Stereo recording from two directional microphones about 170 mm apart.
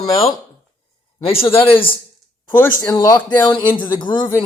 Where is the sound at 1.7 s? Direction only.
30° left (ahead or behind).